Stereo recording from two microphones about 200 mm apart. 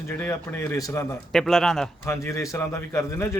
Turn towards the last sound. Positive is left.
turn(degrees=15)  # may be behind; listen again after turning